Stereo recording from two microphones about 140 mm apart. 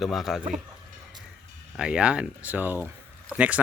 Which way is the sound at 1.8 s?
5° right (ahead or behind).